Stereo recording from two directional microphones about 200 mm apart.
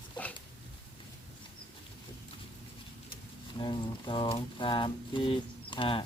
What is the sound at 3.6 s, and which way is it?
Speech, 25° left (ahead or behind).